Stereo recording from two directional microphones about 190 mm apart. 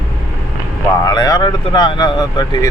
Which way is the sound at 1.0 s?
20° left (ahead or behind).